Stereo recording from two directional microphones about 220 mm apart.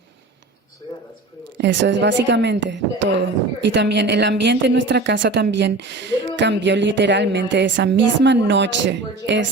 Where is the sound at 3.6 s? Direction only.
50° right (ahead or behind).